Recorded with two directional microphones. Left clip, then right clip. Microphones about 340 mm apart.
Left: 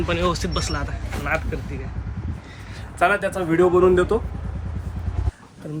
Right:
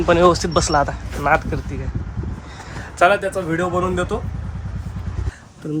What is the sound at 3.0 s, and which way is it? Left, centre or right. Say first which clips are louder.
Speech: right 4 dB; right.